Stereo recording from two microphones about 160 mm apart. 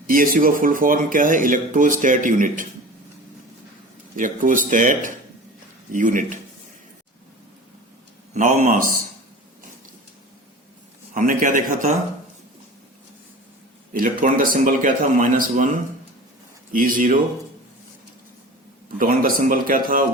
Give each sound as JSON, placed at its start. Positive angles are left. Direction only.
{"t": 0.1, "sound": "speech", "side_deg": -60}
{"t": 4.2, "sound": "speech", "side_deg": -55}
{"t": 8.3, "sound": "speech", "side_deg": -45}
{"t": 11.1, "sound": "speech", "side_deg": -55}
{"t": 13.9, "sound": "speech", "side_deg": -60}
{"t": 16.7, "sound": "speech", "side_deg": -60}
{"t": 18.9, "sound": "speech", "side_deg": -60}